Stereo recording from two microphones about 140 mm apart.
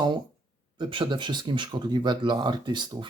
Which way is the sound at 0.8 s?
35° right (ahead or behind).